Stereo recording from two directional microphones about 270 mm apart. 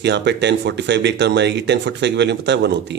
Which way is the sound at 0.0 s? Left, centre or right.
Right.